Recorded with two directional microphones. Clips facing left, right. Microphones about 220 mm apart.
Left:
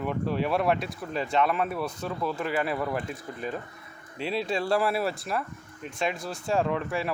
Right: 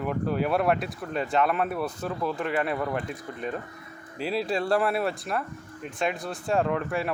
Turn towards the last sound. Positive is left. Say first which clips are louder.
# right 1 dB
turn(degrees=0)  # may be behind; listen again after turning